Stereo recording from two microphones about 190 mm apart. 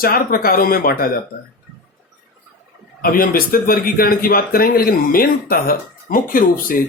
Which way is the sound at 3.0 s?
50° left (ahead or behind).